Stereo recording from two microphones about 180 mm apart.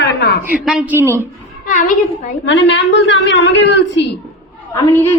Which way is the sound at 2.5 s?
85° left.